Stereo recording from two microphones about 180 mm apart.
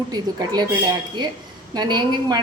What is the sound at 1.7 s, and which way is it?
Speech, 25° right (ahead or behind).